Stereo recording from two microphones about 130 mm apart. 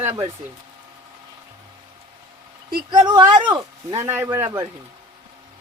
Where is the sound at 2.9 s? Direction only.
35° right (ahead or behind).